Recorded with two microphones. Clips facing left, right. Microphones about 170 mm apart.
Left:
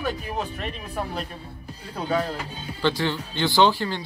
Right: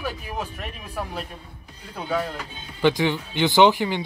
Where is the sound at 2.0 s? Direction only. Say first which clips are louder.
Left 1 dB; 10° right (ahead or behind).